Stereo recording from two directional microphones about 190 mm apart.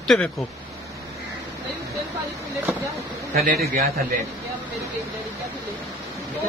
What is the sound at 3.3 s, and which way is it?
Speech, 50° right (ahead or behind).